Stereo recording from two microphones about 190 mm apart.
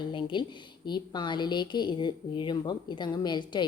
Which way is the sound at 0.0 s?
25° left (ahead or behind).